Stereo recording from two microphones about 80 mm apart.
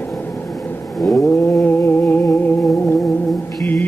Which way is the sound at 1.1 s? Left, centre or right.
Left.